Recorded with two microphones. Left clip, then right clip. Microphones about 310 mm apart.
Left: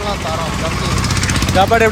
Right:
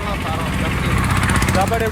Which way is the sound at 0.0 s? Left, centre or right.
Left.